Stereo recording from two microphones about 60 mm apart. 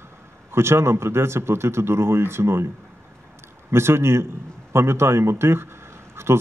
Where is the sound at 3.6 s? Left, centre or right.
Right.